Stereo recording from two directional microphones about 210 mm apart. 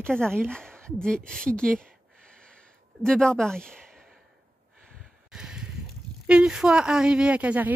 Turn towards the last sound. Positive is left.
turn(degrees=-5)  # may be behind; listen again after turning